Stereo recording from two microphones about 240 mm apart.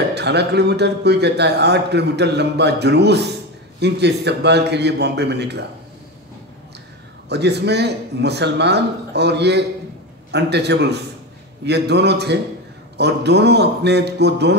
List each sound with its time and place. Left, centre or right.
0.1 s a man's voice: right
7.2 s a man's voice: right